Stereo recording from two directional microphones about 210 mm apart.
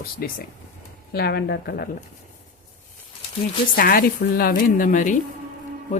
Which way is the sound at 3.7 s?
45° left (ahead or behind).